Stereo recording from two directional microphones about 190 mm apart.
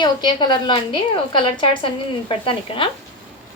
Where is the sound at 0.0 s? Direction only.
25° left (ahead or behind).